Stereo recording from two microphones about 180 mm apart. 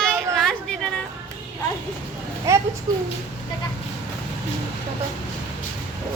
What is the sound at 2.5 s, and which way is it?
Speech, 15° right (ahead or behind).